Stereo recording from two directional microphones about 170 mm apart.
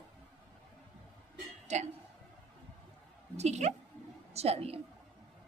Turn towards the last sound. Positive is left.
turn(degrees=-35)  # may be behind; listen again after turning